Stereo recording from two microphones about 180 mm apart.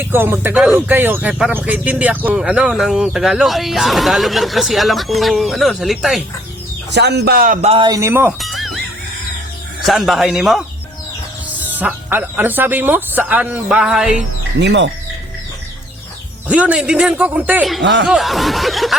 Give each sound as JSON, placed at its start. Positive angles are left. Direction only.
{"t": 0.1, "sound": "speech", "side_deg": -10}
{"t": 6.9, "sound": "speech", "side_deg": -70}
{"t": 7.7, "sound": "speech", "side_deg": -25}
{"t": 8.4, "sound": "music", "side_deg": 0}
{"t": 9.8, "sound": "speech", "side_deg": 0}
{"t": 14.6, "sound": "speech", "side_deg": -70}
{"t": 16.5, "sound": "speech", "side_deg": -10}
{"t": 17.8, "sound": "speech", "side_deg": -75}
{"t": 18.1, "sound": "speech", "side_deg": 0}